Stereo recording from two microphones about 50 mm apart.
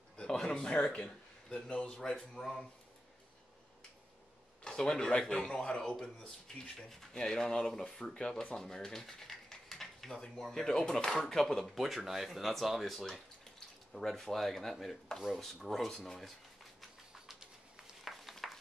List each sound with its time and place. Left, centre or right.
0.2 s a man's voice: centre
4.6 s speech: centre
13.9 s speech: centre
16.8 s bird: centre
18.0 s a sound: centre